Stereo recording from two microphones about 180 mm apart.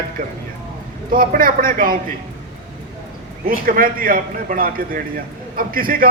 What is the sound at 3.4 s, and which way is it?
A man's voice, 55° right (ahead or behind).